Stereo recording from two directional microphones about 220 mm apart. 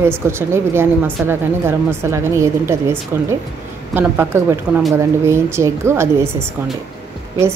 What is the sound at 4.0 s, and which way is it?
A woman's voice, 10° right (ahead or behind).